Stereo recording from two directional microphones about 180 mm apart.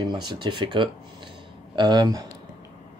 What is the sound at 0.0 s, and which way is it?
Speech, 25° right (ahead or behind).